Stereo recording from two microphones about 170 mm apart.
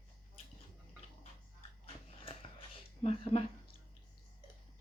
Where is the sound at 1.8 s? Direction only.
35° left (ahead or behind).